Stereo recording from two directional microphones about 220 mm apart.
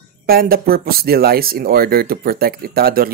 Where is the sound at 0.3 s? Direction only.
45° right (ahead or behind).